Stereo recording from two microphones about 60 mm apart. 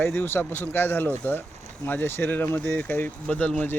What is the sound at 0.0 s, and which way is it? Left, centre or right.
Speech, left.